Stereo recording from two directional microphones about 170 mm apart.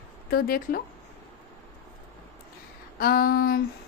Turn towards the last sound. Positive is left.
turn(degrees=60)  # may be behind; listen again after turning